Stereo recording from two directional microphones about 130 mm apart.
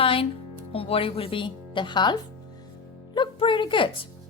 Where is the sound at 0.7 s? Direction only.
45° left (ahead or behind).